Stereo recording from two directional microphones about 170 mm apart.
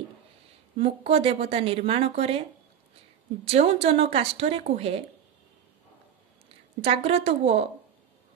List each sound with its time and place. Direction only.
0.7 s speech: 35° right (ahead or behind)
3.4 s speech: 35° right (ahead or behind)
6.5 s a woman's voice: 35° right (ahead or behind)